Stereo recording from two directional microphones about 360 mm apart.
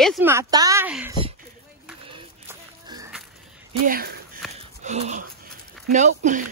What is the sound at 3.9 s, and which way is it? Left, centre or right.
Speech, right.